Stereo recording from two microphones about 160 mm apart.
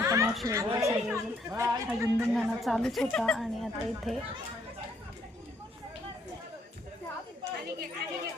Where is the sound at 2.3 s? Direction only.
Centre (ahead or behind).